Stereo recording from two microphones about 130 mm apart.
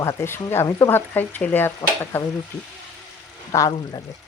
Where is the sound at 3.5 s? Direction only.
25° left (ahead or behind).